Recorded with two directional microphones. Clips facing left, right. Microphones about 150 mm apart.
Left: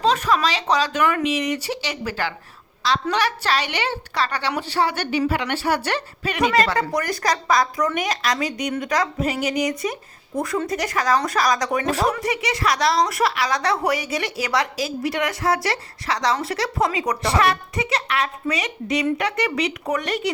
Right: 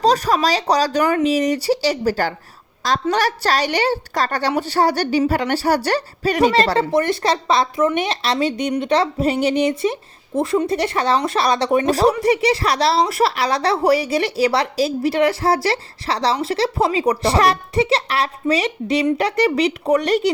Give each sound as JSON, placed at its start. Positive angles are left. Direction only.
{"t": 0.0, "sound": "a woman's voice", "side_deg": -40}